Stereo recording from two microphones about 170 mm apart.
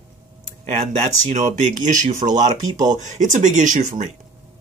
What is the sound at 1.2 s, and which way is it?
Speech, 45° right (ahead or behind).